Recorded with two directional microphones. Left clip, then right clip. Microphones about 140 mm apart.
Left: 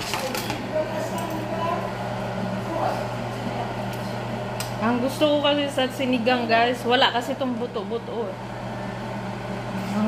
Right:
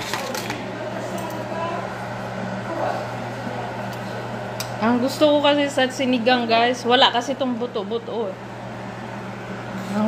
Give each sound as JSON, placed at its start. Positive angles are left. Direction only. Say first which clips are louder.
{"t": 4.8, "sound": "a woman's voice", "louder": "right 4 dB", "side_deg": -25}